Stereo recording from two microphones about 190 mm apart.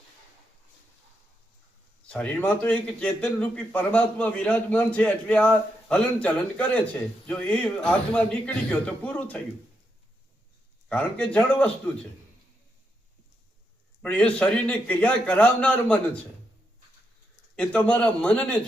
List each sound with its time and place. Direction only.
2.0 s a man's voice: 5° left (ahead or behind)
10.8 s a man's voice: 5° left (ahead or behind)
14.0 s a man's voice: 5° left (ahead or behind)
17.6 s a man's voice: 5° left (ahead or behind)